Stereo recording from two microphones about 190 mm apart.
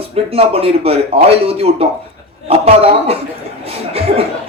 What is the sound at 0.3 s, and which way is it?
A man's voice, 30° right (ahead or behind).